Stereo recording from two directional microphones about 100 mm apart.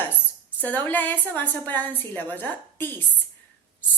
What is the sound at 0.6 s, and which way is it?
A woman's voice, 15° left (ahead or behind).